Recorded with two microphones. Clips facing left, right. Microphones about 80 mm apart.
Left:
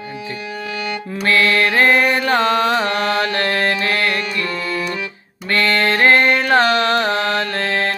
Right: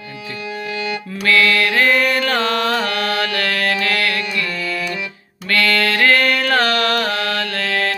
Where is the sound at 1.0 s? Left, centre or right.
Left.